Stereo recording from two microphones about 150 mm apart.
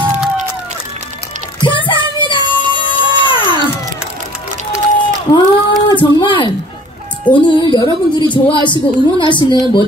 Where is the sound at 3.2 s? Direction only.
35° left (ahead or behind).